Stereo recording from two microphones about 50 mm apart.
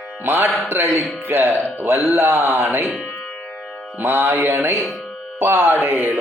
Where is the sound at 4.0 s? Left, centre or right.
Right.